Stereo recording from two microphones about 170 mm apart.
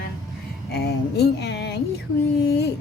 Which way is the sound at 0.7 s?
75° left (ahead or behind).